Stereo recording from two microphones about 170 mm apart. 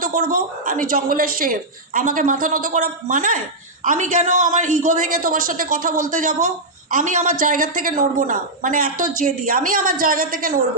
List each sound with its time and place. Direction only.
0.0 s a woman's voice: 55° right (ahead or behind)